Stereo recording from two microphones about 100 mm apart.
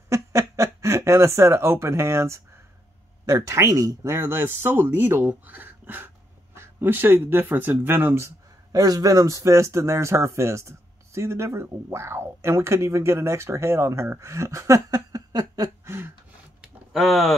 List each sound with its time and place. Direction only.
0.1 s speech: 30° right (ahead or behind)
8.7 s speech: 40° right (ahead or behind)
16.6 s a sound: centre (ahead or behind)